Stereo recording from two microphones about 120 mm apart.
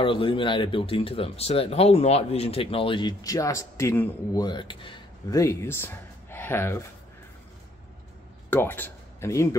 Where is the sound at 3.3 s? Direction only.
25° left (ahead or behind).